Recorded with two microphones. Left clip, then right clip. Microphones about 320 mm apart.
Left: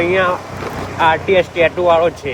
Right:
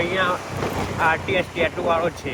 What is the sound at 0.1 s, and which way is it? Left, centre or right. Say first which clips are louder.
Speech: left 7 dB; left.